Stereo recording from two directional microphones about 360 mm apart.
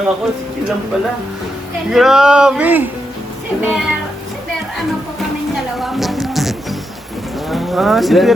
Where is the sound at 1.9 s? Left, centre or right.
Centre.